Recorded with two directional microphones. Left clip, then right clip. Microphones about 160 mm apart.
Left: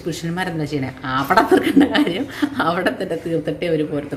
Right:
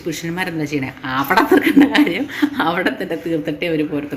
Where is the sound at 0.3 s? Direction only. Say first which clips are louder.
Right 1 dB; 5° left (ahead or behind).